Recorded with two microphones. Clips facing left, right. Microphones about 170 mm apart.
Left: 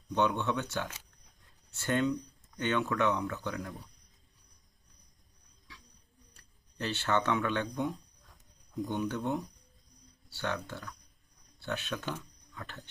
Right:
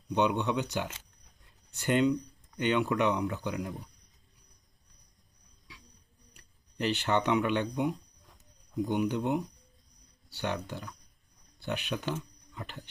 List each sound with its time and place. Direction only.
0.1 s speech: 15° right (ahead or behind)
6.3 s speech: 15° right (ahead or behind)